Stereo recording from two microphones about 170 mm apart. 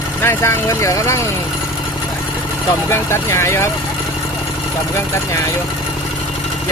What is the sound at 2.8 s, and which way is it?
Speech, 15° left (ahead or behind).